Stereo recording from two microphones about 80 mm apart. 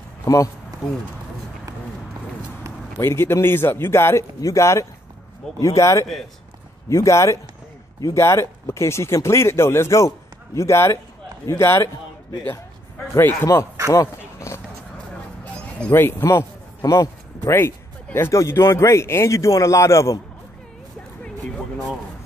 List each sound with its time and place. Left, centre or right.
3.0 s speech: left
13.2 s speech: left
13.9 s a sound: left
15.9 s a man's voice: left
21.2 s music: centre